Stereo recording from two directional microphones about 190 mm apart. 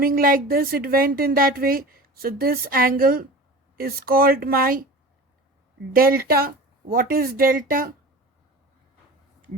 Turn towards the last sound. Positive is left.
turn(degrees=-45)  # may be behind; listen again after turning